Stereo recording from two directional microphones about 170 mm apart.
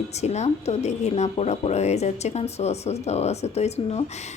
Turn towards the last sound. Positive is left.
turn(degrees=40)  # may be behind; listen again after turning